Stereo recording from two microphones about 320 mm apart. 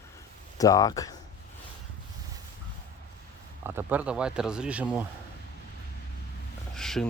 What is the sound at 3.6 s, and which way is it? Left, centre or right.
Speech, centre.